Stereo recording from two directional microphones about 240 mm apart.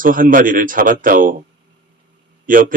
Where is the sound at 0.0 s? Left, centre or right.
Right.